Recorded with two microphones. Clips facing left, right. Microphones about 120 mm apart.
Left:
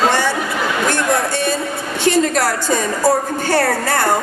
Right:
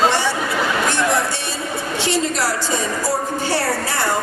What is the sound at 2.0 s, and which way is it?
A woman's voice, 50° left (ahead or behind).